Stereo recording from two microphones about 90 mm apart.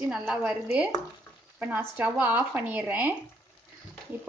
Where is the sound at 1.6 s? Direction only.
20° right (ahead or behind).